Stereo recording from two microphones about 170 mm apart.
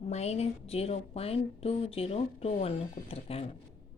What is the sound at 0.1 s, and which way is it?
A woman's voice, 40° left (ahead or behind).